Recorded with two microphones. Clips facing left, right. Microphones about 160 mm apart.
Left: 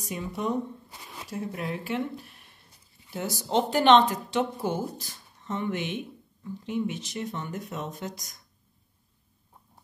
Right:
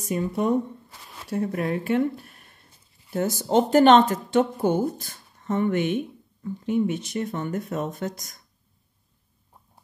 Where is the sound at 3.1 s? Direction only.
50° right (ahead or behind).